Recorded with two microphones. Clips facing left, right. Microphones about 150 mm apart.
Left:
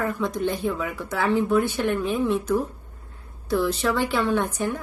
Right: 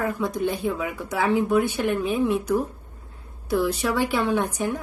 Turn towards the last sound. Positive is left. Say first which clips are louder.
# even
turn(degrees=-10)  # may be behind; listen again after turning